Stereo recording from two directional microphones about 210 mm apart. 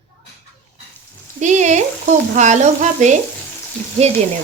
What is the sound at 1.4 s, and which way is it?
A woman's voice, 35° right (ahead or behind).